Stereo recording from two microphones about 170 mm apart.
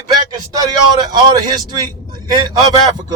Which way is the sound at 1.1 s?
25° right (ahead or behind).